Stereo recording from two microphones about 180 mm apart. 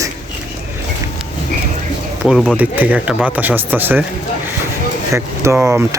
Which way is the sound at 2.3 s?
5° right (ahead or behind).